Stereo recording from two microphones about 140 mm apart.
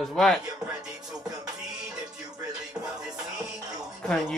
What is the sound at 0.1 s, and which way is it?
Speech, centre (ahead or behind).